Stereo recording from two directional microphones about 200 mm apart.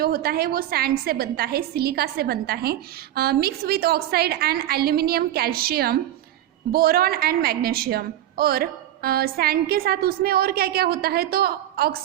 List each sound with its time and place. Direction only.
0.0 s a woman's voice: 50° right (ahead or behind)